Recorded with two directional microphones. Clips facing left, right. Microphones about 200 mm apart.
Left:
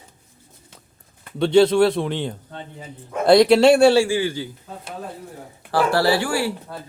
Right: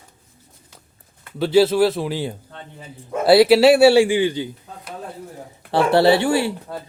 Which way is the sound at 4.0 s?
20° right (ahead or behind).